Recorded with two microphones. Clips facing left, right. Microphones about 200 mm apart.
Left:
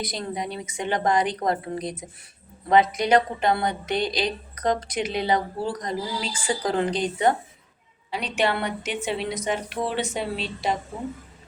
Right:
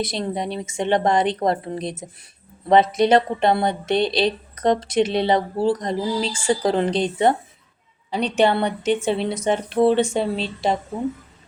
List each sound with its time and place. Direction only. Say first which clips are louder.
0.0 s speech: right 5 dB; 25° right (ahead or behind)